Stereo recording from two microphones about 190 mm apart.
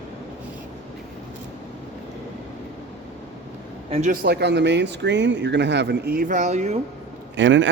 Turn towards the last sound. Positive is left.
turn(degrees=-75)  # may be behind; listen again after turning